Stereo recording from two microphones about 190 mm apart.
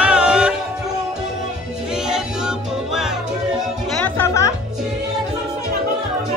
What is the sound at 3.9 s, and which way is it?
Music, 10° left (ahead or behind).